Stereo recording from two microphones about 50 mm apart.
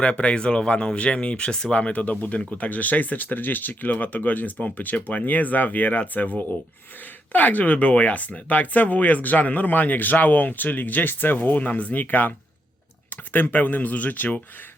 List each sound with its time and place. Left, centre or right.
0.0 s speech: left
1.7 s speech: left
13.3 s speech: left